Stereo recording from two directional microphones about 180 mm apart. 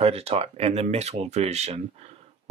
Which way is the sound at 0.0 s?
35° right (ahead or behind).